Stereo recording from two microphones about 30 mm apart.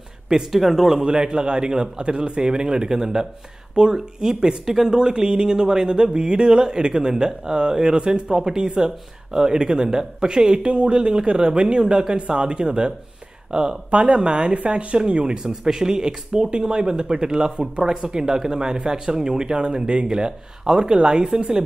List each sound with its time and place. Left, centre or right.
0.5 s speech: centre
1.0 s speech: right
11.8 s speech: right
15.3 s speech: right